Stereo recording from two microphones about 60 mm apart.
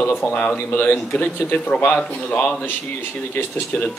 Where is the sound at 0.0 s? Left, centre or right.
Left.